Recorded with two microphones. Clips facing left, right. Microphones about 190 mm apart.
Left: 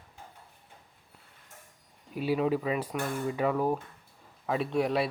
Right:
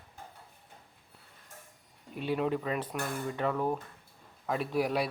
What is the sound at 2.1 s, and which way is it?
Speech, 5° left (ahead or behind).